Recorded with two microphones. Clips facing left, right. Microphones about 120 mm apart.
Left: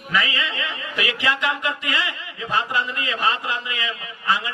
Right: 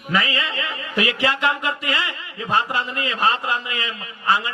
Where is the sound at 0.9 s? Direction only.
30° right (ahead or behind).